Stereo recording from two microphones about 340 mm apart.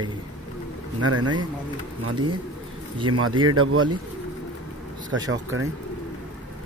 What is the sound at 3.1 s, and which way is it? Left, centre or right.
Speech, right.